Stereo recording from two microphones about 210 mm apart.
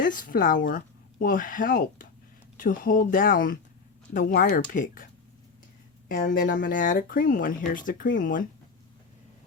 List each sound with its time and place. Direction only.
0.0 s speech: 40° left (ahead or behind)
6.1 s speech: 40° left (ahead or behind)